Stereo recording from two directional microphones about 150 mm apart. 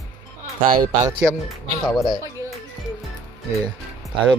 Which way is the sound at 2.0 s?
30° left (ahead or behind).